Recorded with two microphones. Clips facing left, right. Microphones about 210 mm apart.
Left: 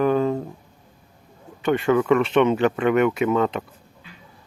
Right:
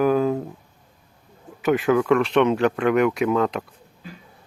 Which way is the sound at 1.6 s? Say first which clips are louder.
Even; centre (ahead or behind).